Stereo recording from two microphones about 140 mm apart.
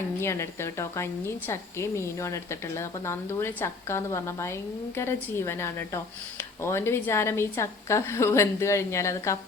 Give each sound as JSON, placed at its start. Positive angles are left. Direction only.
{"t": 0.2, "sound": "speech", "side_deg": 20}